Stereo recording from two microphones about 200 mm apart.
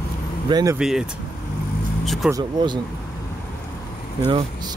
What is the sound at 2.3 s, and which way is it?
Speech, 20° right (ahead or behind).